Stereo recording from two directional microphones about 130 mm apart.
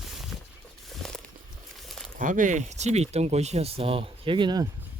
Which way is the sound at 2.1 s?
85° right.